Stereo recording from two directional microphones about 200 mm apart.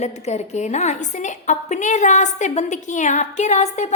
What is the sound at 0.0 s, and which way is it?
A woman's voice, 35° left (ahead or behind).